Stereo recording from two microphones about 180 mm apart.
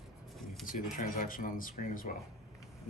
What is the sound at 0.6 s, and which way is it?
Speech, 50° left (ahead or behind).